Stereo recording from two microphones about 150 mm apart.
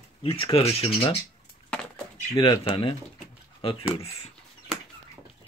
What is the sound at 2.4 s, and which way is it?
Speech, 35° left (ahead or behind).